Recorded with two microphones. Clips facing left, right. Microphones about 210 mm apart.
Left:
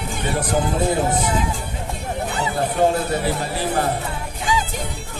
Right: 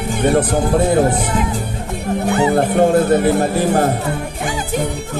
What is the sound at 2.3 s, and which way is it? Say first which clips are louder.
Speech: right 10 dB; 60° right (ahead or behind).